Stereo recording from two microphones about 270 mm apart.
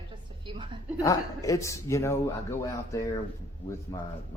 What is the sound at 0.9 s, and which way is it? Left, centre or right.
Speech, centre.